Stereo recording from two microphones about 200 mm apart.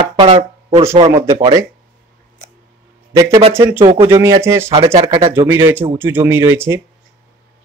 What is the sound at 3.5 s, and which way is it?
Speech, 10° right (ahead or behind).